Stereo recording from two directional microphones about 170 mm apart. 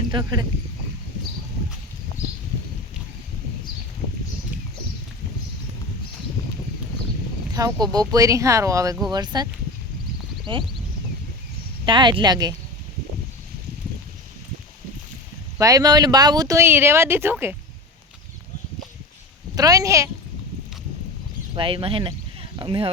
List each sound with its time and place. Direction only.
0.1 s speech: 25° right (ahead or behind)
7.5 s speech: 20° right (ahead or behind)
10.5 s speech: 30° right (ahead or behind)
11.9 s speech: 30° right (ahead or behind)
15.5 s speech: 20° right (ahead or behind)
19.5 s speech: 20° right (ahead or behind)
21.5 s speech: 30° right (ahead or behind)